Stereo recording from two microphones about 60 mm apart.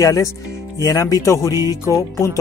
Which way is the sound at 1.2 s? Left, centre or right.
Left.